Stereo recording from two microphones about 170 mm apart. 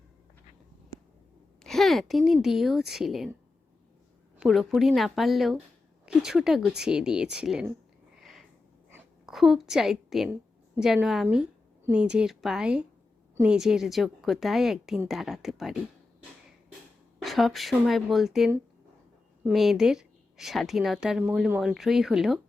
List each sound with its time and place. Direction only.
1.6 s a woman's voice: centre (ahead or behind)
4.4 s a woman's voice: centre (ahead or behind)
8.1 s a sound: centre (ahead or behind)
9.2 s a woman's voice: centre (ahead or behind)
17.2 s a woman's voice: centre (ahead or behind)